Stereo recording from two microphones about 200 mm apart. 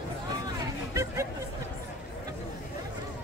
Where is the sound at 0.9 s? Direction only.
15° right (ahead or behind).